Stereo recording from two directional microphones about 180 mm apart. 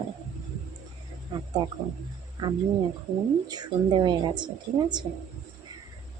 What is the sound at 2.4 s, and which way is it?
A woman's voice, 20° right (ahead or behind).